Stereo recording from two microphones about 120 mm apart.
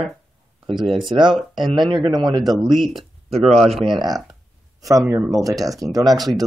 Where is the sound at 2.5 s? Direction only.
Centre (ahead or behind).